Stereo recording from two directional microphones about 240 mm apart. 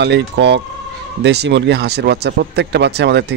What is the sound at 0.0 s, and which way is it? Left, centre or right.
A man's voice, right.